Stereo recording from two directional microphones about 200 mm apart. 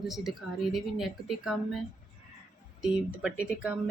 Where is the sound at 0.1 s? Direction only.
Centre (ahead or behind).